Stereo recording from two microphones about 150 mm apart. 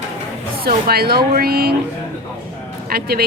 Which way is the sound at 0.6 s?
90° right.